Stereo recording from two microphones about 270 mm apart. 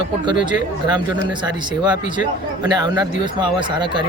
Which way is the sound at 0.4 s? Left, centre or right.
Centre.